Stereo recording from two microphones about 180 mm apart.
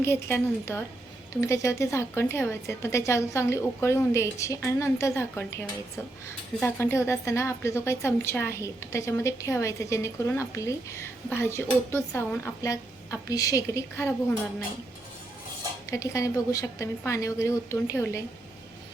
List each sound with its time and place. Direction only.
0.0 s a woman's voice: 15° left (ahead or behind)
15.9 s a woman's voice: 20° left (ahead or behind)